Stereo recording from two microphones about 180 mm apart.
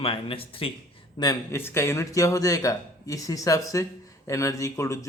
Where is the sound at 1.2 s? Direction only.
15° left (ahead or behind).